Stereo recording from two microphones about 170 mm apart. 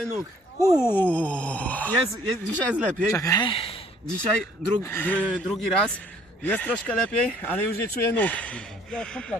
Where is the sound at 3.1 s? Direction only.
20° left (ahead or behind).